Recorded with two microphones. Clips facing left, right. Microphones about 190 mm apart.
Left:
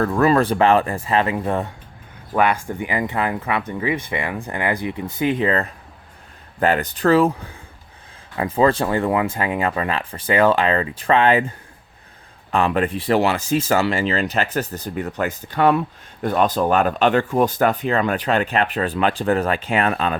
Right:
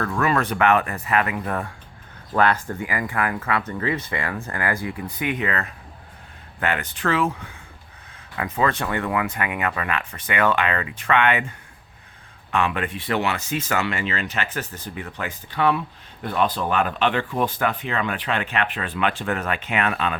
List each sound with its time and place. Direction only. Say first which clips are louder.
0.0 s speech: left 6 dB; 35° left (ahead or behind)
2.3 s speech: left 2 dB; 10° left (ahead or behind)
5.1 s speech: left 7 dB; 30° left (ahead or behind)